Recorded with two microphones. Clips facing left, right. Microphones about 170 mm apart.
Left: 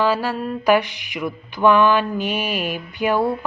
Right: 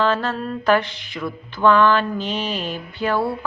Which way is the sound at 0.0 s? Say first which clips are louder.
Left 1 dB; 10° left (ahead or behind).